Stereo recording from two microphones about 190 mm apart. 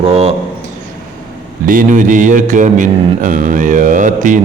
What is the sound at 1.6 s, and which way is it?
Mantra, 45° right (ahead or behind).